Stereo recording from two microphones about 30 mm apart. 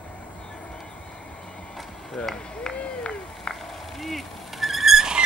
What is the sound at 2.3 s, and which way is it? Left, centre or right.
Speech, left.